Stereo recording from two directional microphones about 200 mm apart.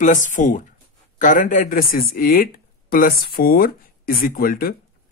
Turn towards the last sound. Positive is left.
turn(degrees=45)  # may be behind; listen again after turning